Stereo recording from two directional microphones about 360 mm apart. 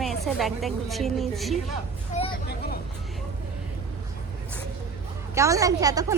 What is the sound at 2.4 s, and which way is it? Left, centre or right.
Vehicle, left.